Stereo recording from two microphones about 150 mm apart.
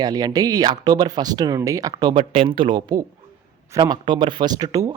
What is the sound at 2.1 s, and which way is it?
Speech, 35° right (ahead or behind).